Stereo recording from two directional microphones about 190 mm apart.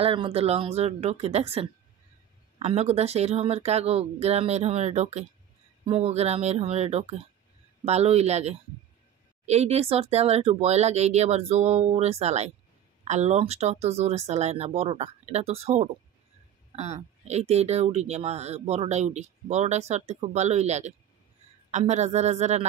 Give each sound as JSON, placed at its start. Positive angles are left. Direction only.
{"t": 0.0, "sound": "speech", "side_deg": -30}